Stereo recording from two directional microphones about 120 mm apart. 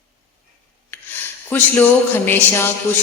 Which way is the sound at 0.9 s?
15° left (ahead or behind).